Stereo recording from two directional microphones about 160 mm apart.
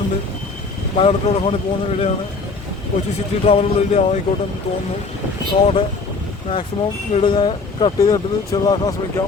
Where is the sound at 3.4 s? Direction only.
40° left (ahead or behind).